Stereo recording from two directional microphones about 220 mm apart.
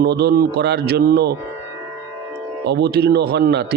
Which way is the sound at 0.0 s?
45° right (ahead or behind).